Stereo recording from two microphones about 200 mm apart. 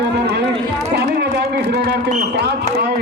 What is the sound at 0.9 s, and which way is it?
Speech, 55° right (ahead or behind).